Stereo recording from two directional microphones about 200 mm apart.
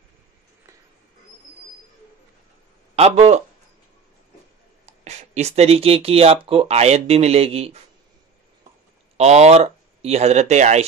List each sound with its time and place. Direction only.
3.0 s speech: 30° right (ahead or behind)
4.8 s speech: 35° right (ahead or behind)
9.1 s speech: 30° right (ahead or behind)